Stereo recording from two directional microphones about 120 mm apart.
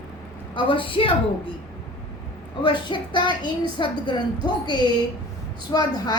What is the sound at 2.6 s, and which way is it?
A woman's voice, 40° left (ahead or behind).